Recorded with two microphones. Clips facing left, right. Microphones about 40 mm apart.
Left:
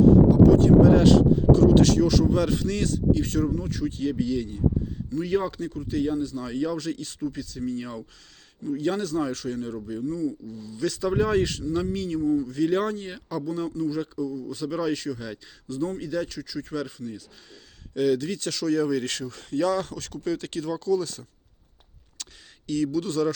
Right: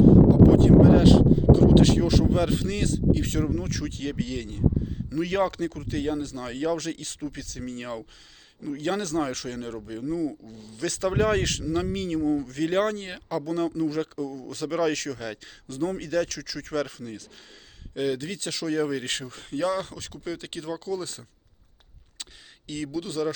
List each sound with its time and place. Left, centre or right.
0.0 s a sound: right
0.9 s speech: right
3.5 s speech: right
7.4 s speech: right
10.0 s speech: right
10.4 s speech: right
11.9 s speech: right
13.4 s speech: right
17.9 s speech: right
19.6 s speech: right
22.2 s a sound: right
23.0 s speech: centre